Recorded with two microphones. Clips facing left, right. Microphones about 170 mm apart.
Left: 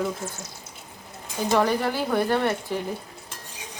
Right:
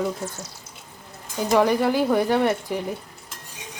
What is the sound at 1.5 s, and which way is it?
A woman's voice, 10° right (ahead or behind).